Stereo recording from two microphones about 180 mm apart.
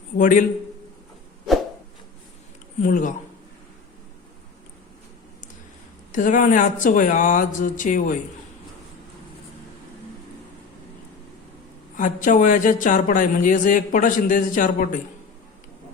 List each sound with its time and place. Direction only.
0.2 s a man's voice: 45° left (ahead or behind)
2.8 s a man's voice: 45° left (ahead or behind)
6.1 s a man's voice: 45° left (ahead or behind)
11.9 s a man's voice: 45° left (ahead or behind)